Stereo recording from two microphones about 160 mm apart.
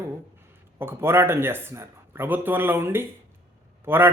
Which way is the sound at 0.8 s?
15° right (ahead or behind).